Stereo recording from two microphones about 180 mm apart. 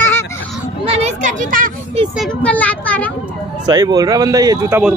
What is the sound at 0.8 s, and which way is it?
Speech, 35° right (ahead or behind).